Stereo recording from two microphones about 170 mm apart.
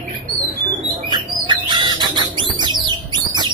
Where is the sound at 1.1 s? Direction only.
25° right (ahead or behind).